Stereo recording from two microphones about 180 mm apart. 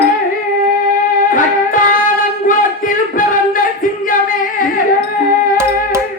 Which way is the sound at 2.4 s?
50° left (ahead or behind).